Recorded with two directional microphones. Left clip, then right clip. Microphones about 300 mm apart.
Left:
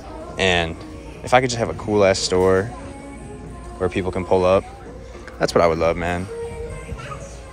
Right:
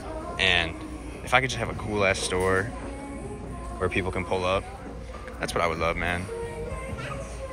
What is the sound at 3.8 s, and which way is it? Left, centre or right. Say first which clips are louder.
Speech: left 5 dB; centre.